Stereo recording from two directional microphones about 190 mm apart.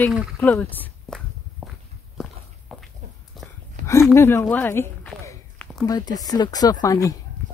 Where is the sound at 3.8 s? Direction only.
15° left (ahead or behind).